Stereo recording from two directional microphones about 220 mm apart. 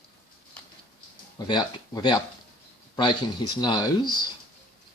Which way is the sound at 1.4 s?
15° left (ahead or behind).